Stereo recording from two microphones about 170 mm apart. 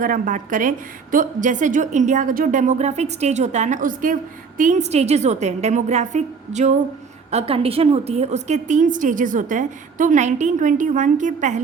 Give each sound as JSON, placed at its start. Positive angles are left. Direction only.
{"t": 0.0, "sound": "a woman's voice", "side_deg": -50}